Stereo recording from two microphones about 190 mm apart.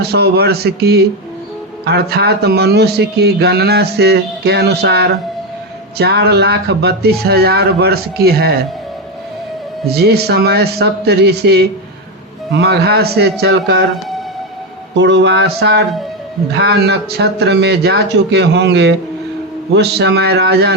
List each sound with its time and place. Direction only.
0.0 s a man's voice: 55° right (ahead or behind)
9.8 s a man's voice: 55° right (ahead or behind)
14.9 s a man's voice: 70° right (ahead or behind)